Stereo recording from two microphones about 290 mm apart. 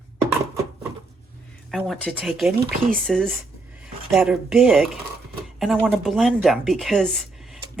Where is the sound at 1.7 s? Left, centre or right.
Centre.